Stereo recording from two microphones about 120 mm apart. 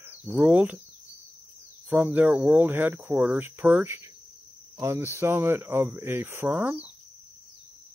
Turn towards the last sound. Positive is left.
turn(degrees=-15)  # may be behind; listen again after turning